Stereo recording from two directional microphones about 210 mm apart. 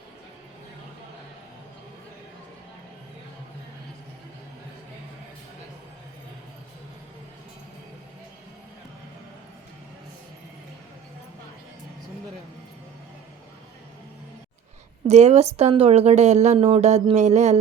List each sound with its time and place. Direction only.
15.0 s speech: 30° right (ahead or behind)